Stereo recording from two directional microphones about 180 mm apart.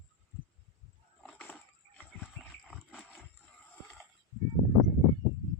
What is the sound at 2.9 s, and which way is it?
Wild animals, centre (ahead or behind).